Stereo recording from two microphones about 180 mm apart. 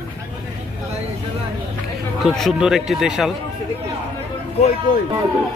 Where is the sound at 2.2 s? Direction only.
Centre (ahead or behind).